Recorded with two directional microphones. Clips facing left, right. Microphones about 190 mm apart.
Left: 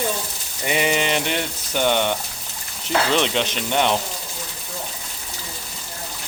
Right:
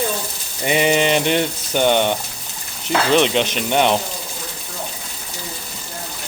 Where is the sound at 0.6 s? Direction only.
25° right (ahead or behind).